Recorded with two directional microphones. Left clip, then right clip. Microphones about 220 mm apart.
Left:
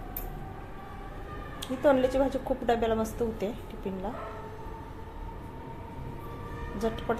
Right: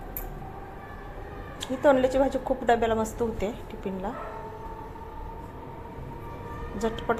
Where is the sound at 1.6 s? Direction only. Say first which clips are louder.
Right 3 dB; 10° right (ahead or behind).